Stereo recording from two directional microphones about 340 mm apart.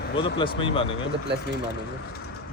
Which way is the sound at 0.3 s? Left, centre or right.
Centre.